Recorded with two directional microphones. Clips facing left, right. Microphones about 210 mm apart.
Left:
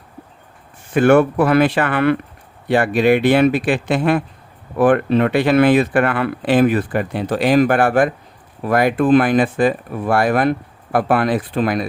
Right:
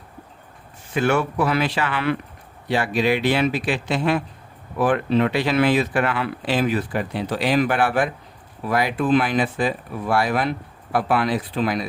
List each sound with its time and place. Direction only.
0.9 s speech: 55° left (ahead or behind)